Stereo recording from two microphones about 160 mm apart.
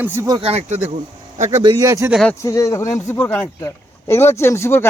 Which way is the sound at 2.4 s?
20° left (ahead or behind).